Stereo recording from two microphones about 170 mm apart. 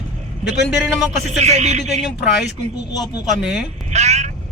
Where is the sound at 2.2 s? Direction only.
5° right (ahead or behind).